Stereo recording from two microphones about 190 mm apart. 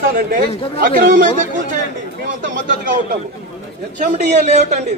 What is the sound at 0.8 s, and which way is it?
Speech, 45° right (ahead or behind).